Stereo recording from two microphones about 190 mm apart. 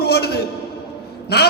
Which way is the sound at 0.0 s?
55° left (ahead or behind).